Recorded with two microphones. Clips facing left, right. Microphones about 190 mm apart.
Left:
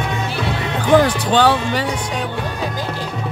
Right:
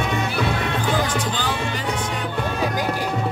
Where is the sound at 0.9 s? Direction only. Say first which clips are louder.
Left 14 dB; 70° left (ahead or behind).